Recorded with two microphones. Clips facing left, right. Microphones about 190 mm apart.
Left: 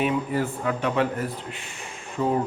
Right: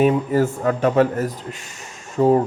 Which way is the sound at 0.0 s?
40° right (ahead or behind).